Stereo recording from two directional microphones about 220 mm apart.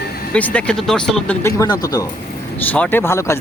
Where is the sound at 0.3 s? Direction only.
5° left (ahead or behind).